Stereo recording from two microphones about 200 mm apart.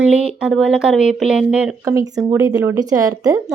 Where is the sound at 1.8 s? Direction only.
15° right (ahead or behind).